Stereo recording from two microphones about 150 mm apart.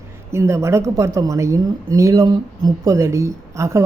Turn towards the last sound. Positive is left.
turn(degrees=-20)  # may be behind; listen again after turning